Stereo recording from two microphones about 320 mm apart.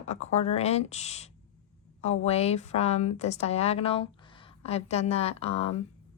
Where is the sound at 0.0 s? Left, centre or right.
Left.